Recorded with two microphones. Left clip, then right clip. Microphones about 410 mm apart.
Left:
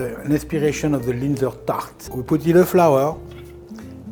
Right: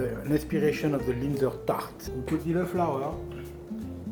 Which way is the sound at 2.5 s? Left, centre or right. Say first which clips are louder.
Left 15 dB; left.